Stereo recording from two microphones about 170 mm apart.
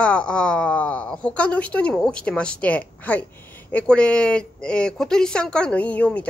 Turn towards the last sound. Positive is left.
turn(degrees=10)  # may be behind; listen again after turning